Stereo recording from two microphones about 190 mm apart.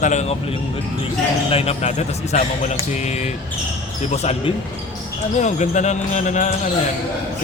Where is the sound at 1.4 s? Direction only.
30° left (ahead or behind).